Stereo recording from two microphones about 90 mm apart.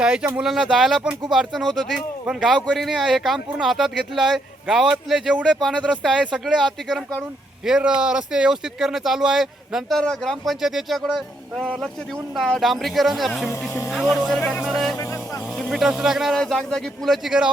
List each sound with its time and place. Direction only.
0.0 s speech: 10° right (ahead or behind)
5.5 s speech: 5° left (ahead or behind)
14.9 s music: 30° left (ahead or behind)
15.5 s speech: 5° right (ahead or behind)
16.3 s speech: 5° left (ahead or behind)